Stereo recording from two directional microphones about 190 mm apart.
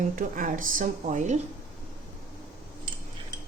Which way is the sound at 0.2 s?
45° right (ahead or behind).